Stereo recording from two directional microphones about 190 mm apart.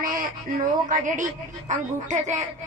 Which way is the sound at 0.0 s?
50° right (ahead or behind).